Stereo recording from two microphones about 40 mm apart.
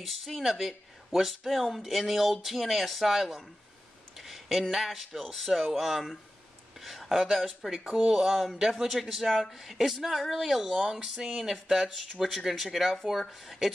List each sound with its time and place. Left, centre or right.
0.0 s a man's voice: centre
7.7 s a man's voice: centre